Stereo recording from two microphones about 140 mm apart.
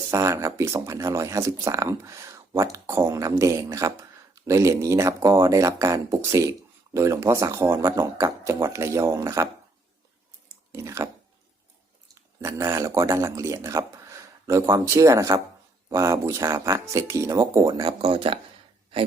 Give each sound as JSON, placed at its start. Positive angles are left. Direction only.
{"t": 0.1, "sound": "speech", "side_deg": -20}
{"t": 10.7, "sound": "speech", "side_deg": -20}
{"t": 12.4, "sound": "speech", "side_deg": -20}
{"t": 17.7, "sound": "speech", "side_deg": -35}